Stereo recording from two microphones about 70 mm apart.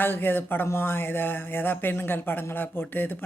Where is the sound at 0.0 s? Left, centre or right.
Left.